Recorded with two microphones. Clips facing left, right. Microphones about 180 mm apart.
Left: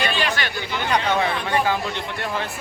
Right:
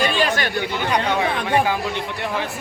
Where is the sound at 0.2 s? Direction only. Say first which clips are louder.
Right 4 dB; 45° right (ahead or behind).